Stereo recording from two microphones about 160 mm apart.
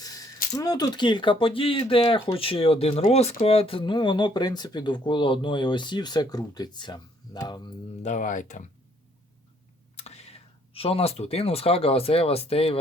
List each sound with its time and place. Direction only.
0.0 s a sound: 25° left (ahead or behind)
0.5 s speech: 20° left (ahead or behind)
8.0 s speech: 50° left (ahead or behind)
9.9 s speech: 40° left (ahead or behind)